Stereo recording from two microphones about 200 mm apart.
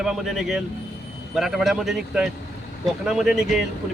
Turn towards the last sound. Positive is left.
turn(degrees=0)  # may be behind; listen again after turning